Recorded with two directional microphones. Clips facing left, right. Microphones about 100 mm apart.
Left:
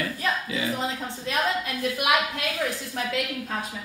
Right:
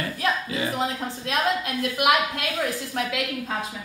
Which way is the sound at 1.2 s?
70° right (ahead or behind).